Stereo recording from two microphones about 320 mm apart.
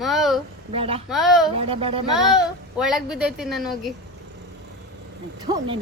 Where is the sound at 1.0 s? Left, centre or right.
Centre.